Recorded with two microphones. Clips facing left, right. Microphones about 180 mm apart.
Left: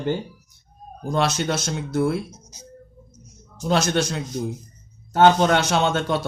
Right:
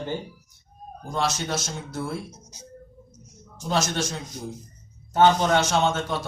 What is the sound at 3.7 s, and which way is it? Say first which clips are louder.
Speech: left 5 dB; 65° left (ahead or behind).